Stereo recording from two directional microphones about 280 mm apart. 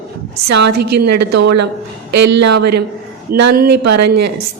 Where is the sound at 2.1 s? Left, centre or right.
Right.